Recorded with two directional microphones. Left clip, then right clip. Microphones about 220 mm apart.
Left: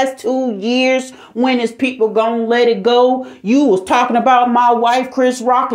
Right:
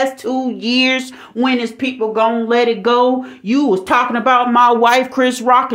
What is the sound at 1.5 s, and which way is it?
Speech, 15° left (ahead or behind).